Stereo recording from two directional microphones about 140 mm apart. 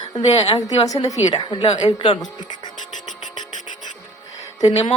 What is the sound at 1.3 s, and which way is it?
Speech, 40° left (ahead or behind).